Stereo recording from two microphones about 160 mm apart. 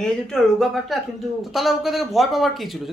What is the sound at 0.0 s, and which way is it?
A man's voice, 5° left (ahead or behind).